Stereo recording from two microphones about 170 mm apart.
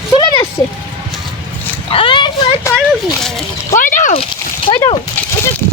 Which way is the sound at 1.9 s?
30° left (ahead or behind).